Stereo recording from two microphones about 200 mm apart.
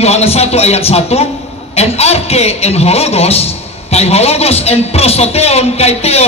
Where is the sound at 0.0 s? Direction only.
30° left (ahead or behind).